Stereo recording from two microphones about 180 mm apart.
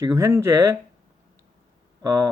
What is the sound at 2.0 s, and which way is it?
Speech, 20° right (ahead or behind).